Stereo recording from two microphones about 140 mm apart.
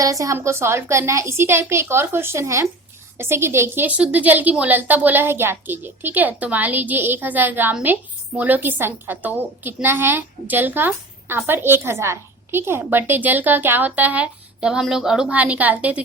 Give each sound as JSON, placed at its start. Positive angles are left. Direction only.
{"t": 0.0, "sound": "a woman's voice", "side_deg": -25}